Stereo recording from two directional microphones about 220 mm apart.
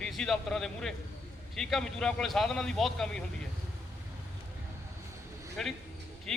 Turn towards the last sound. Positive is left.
turn(degrees=0)  # may be behind; listen again after turning